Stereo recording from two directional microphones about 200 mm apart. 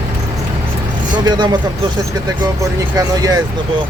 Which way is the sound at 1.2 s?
20° right (ahead or behind).